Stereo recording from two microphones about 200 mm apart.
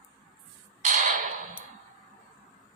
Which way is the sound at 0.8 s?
35° right (ahead or behind).